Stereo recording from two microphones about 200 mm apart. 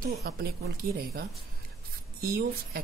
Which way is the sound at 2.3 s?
50° right (ahead or behind).